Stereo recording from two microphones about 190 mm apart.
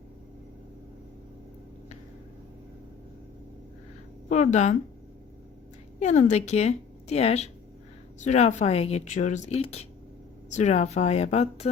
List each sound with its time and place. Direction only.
4.3 s a woman's voice: 40° left (ahead or behind)
6.0 s a woman's voice: 40° left (ahead or behind)